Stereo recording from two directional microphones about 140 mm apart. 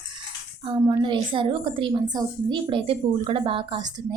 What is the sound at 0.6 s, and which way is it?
A woman's voice, 35° right (ahead or behind).